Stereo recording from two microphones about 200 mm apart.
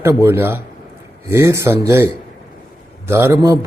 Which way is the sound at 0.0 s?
10° right (ahead or behind).